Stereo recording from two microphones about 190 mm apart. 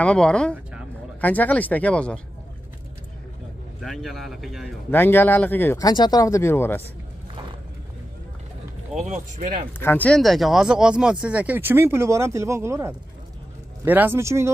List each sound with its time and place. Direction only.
0.0 s speech: 5° left (ahead or behind)
3.8 s speech: centre (ahead or behind)
4.9 s speech: 10° left (ahead or behind)
9.1 s speech: 45° right (ahead or behind)
9.8 s speech: 10° left (ahead or behind); by 14.5 s 15° right (ahead or behind)